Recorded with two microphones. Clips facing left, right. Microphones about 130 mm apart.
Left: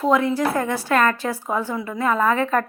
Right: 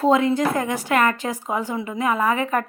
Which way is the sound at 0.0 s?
25° right (ahead or behind).